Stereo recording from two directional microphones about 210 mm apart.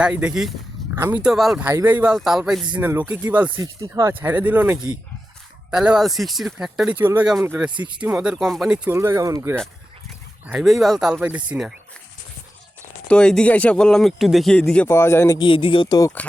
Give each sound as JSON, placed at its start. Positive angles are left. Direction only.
{"t": 0.0, "sound": "speech", "side_deg": -5}
{"t": 7.7, "sound": "speech", "side_deg": -20}
{"t": 8.0, "sound": "speech", "side_deg": -5}
{"t": 10.4, "sound": "speech", "side_deg": 0}
{"t": 13.1, "sound": "speech", "side_deg": 5}